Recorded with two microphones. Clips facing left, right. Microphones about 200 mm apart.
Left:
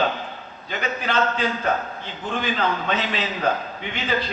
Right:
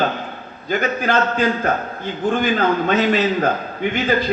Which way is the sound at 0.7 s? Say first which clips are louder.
Right 6 dB; 45° right (ahead or behind).